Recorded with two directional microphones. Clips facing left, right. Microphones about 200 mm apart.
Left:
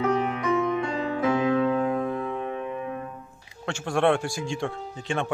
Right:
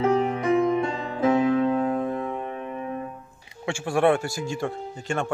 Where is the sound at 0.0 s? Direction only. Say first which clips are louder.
Right 3 dB; 30° right (ahead or behind).